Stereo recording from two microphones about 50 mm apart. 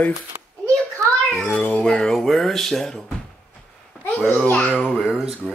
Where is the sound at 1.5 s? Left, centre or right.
Left.